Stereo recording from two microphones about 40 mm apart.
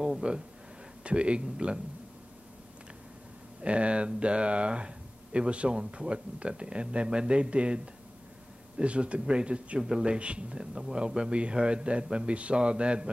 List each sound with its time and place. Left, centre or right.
0.2 s speech: right
3.6 s speech: right